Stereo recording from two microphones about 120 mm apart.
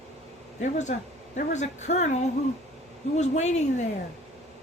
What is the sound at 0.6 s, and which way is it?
A woman's voice, 80° left.